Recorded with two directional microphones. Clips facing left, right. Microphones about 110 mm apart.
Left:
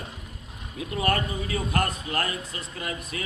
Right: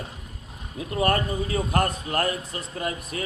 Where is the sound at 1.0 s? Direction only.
40° right (ahead or behind).